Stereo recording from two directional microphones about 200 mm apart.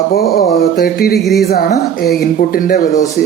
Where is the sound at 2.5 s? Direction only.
40° left (ahead or behind).